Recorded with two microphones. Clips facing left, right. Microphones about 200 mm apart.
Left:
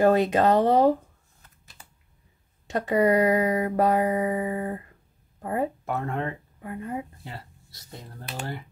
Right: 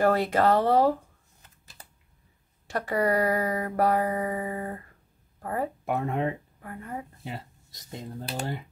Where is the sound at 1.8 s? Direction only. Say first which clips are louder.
Right 1 dB; 40° right (ahead or behind).